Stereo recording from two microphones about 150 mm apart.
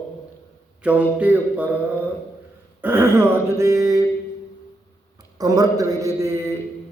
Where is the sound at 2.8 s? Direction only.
15° right (ahead or behind).